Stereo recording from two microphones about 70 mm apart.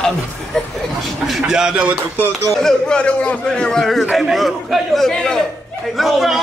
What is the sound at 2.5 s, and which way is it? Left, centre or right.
A man's voice, centre.